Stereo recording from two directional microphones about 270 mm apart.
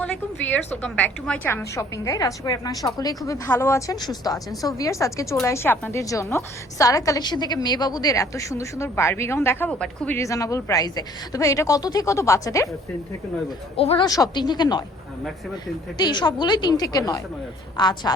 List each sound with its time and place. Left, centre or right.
0.0 s speech: centre
13.7 s speech: left
16.0 s speech: centre